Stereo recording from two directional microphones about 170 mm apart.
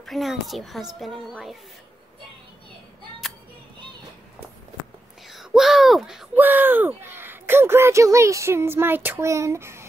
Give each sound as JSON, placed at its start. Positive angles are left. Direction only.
{"t": 0.0, "sound": "a child's voice", "side_deg": 0}
{"t": 5.3, "sound": "speech", "side_deg": 0}